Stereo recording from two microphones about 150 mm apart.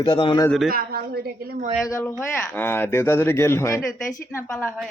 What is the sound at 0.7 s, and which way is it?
Speech, 85° right.